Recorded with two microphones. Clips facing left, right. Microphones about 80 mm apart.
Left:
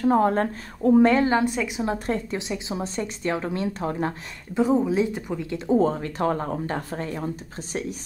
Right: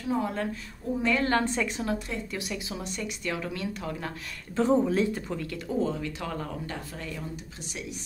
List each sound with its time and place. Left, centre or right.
0.0 s speech: left
1.2 s speech: centre
2.3 s speech: left
4.6 s speech: centre
5.7 s speech: left